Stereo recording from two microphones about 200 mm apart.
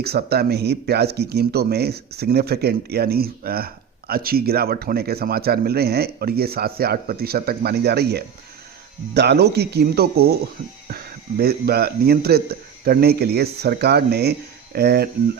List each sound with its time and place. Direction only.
0.0 s a man's voice: 50° right (ahead or behind)